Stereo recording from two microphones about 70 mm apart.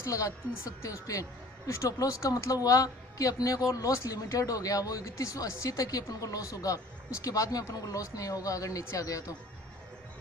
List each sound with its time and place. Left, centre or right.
0.0 s a woman's voice: left